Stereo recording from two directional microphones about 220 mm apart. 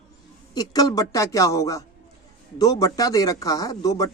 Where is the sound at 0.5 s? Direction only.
15° left (ahead or behind).